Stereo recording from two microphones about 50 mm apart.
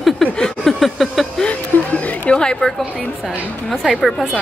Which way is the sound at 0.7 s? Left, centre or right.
Centre.